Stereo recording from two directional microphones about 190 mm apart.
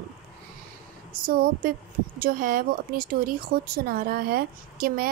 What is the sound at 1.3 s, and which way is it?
Speech, 50° right (ahead or behind).